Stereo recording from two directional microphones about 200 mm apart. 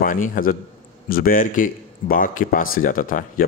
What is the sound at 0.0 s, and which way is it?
A man's voice, 45° left (ahead or behind).